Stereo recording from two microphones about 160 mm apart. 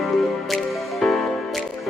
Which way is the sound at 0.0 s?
Centre (ahead or behind).